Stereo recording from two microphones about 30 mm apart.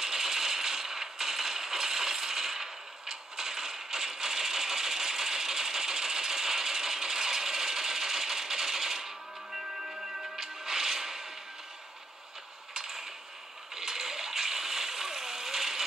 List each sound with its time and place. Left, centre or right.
0.0 s coin: centre
10.4 s music: centre
12.7 s a sound: centre
13.7 s splash: centre